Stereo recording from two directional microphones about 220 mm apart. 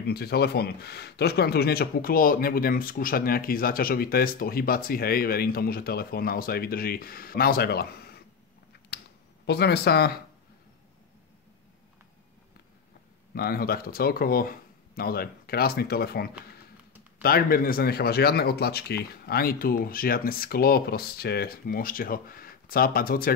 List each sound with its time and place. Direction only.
0.0 s speech: 45° left (ahead or behind)
9.5 s speech: 45° left (ahead or behind)
13.3 s speech: 45° left (ahead or behind)